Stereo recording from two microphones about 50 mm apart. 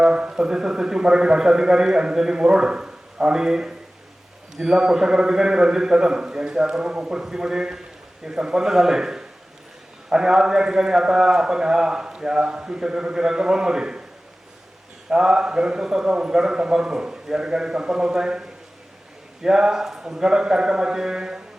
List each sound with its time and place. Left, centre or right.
0.0 s a sound: right
0.3 s a man's voice: centre
15.1 s a man's voice: centre